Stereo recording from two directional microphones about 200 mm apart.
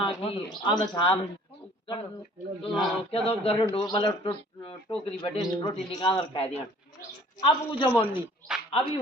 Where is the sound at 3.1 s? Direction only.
30° left (ahead or behind).